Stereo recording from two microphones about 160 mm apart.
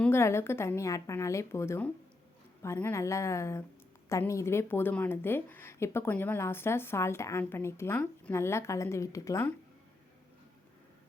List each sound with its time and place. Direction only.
0.0 s a woman's voice: 15° left (ahead or behind)